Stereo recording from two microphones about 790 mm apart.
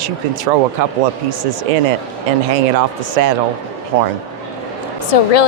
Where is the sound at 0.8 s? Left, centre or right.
Right.